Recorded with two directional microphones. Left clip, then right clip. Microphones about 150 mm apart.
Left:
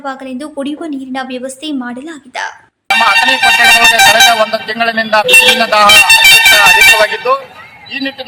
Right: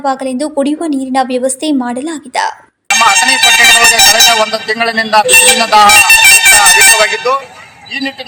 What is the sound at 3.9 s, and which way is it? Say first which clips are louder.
A man's voice: left 1 dB; 5° left (ahead or behind).